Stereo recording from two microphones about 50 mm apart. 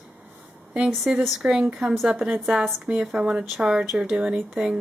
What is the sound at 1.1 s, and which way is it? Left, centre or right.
Speech, centre.